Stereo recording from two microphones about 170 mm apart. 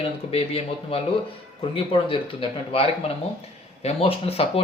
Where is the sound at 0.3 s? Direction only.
35° left (ahead or behind).